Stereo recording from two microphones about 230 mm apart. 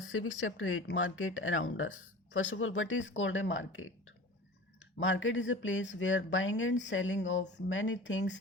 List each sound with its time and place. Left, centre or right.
0.1 s speech: left